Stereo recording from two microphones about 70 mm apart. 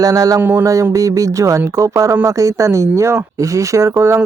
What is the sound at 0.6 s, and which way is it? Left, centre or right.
Speech, right.